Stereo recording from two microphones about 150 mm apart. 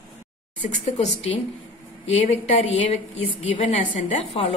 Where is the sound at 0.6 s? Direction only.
50° left (ahead or behind).